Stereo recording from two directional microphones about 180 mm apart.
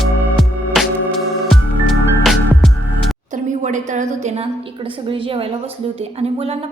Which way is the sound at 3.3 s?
45° right (ahead or behind).